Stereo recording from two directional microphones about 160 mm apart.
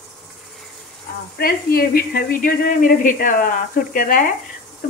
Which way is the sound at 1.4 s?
70° left (ahead or behind).